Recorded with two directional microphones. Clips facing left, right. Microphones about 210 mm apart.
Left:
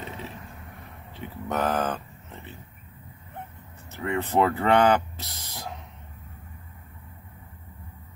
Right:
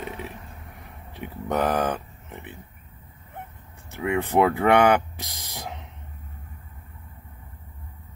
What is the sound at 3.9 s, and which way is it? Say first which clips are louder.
Speech: right 3 dB; 15° right (ahead or behind).